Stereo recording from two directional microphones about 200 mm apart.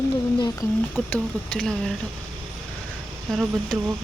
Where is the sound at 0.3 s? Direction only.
20° left (ahead or behind).